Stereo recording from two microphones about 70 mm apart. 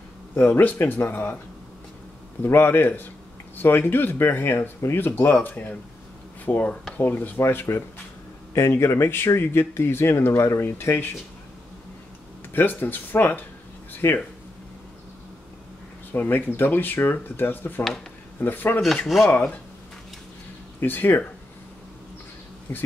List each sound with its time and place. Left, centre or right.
0.4 s speech: left
2.4 s speech: left
12.5 s speech: left
16.1 s speech: left
19.0 s speech: centre
19.3 s speech: left
20.8 s speech: left
22.7 s speech: left